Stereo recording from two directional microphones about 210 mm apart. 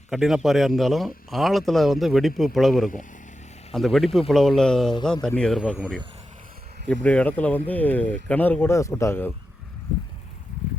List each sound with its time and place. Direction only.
0.1 s speech: centre (ahead or behind)